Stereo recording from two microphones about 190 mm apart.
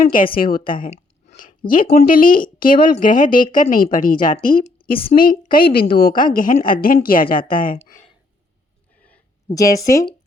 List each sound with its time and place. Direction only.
0.0 s a woman's voice: 45° left (ahead or behind)
9.6 s speech: 20° left (ahead or behind)